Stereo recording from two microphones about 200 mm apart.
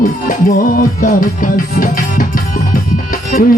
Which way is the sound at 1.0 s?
45° left (ahead or behind).